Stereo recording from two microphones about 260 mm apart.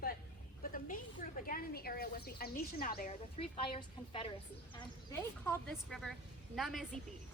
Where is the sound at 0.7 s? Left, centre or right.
Left.